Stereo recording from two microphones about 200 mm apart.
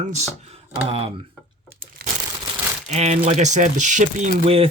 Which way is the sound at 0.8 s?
25° right (ahead or behind).